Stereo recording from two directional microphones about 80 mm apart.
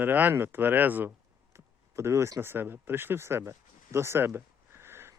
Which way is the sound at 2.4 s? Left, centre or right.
Right.